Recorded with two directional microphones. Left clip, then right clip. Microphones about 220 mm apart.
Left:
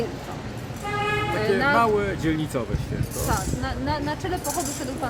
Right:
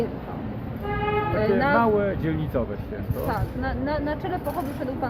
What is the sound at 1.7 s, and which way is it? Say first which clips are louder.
Speech: even; 15° left (ahead or behind).